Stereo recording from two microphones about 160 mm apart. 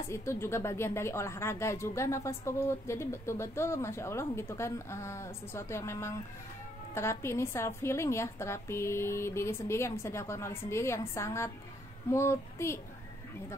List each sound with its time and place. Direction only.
0.1 s speech: 15° left (ahead or behind)